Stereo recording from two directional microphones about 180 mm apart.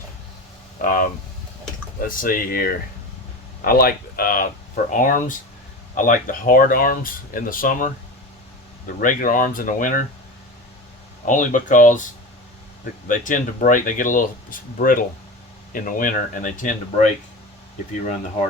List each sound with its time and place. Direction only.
0.8 s speech: 50° left (ahead or behind)
9.0 s speech: 50° left (ahead or behind)
11.3 s speech: 45° left (ahead or behind)